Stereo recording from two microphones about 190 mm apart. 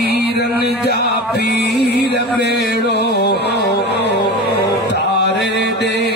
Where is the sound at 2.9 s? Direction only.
60° left (ahead or behind).